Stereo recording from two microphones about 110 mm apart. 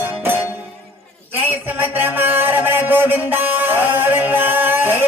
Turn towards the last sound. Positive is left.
turn(degrees=-20)  # may be behind; listen again after turning